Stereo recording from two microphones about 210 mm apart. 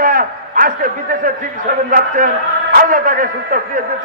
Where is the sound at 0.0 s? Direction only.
40° right (ahead or behind).